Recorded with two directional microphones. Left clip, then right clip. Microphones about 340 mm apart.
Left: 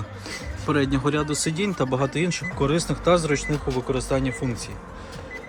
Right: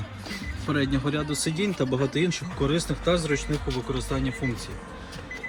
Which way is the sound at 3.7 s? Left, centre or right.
Left.